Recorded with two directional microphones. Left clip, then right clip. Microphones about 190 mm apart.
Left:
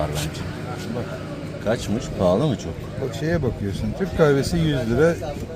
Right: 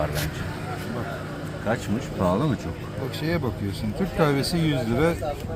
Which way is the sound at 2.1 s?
10° left (ahead or behind).